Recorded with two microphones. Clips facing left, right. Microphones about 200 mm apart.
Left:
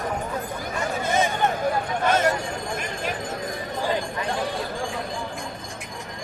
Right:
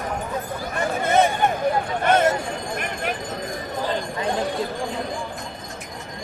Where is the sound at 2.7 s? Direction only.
60° right (ahead or behind).